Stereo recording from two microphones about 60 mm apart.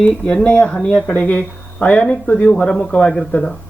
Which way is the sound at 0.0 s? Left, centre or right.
Centre.